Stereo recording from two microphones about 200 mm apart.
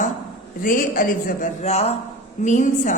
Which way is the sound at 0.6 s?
45° left (ahead or behind).